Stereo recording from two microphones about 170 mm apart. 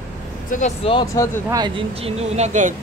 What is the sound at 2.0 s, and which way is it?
Speech, 40° right (ahead or behind).